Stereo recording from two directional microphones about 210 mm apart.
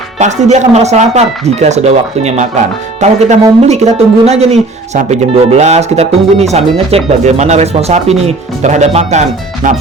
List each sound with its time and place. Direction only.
0.2 s speech: 35° right (ahead or behind)